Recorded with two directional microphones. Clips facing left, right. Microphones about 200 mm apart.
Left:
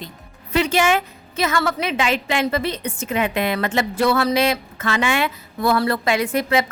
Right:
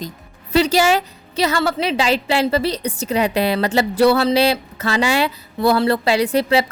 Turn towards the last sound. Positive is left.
turn(degrees=-30)  # may be behind; listen again after turning